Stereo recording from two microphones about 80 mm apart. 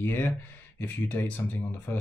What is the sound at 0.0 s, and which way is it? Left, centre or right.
Speech, left.